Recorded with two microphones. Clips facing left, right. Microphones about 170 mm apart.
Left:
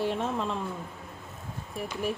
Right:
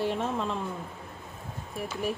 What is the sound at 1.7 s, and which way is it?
Speech, centre (ahead or behind).